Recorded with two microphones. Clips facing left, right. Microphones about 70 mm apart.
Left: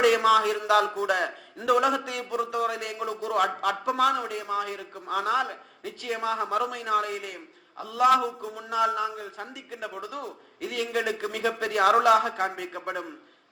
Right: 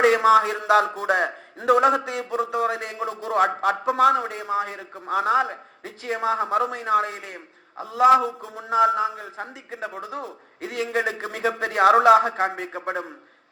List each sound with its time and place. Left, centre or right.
0.0 s speech: right